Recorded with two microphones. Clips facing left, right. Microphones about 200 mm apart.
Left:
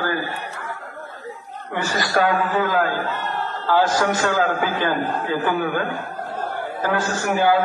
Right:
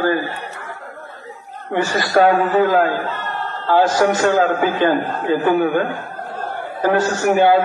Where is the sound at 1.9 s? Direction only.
25° right (ahead or behind).